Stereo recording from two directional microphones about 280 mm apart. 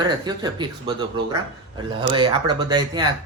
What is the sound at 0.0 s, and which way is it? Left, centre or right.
Speech, centre.